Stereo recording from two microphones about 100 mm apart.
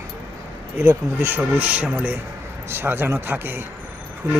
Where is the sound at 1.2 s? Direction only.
20° right (ahead or behind).